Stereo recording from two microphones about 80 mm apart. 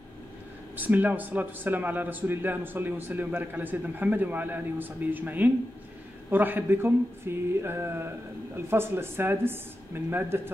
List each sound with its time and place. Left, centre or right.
0.7 s a man's voice: right